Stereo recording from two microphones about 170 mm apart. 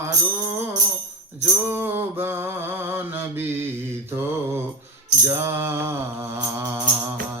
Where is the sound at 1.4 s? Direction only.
10° right (ahead or behind).